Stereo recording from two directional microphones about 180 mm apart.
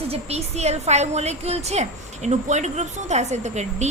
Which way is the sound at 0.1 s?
35° right (ahead or behind).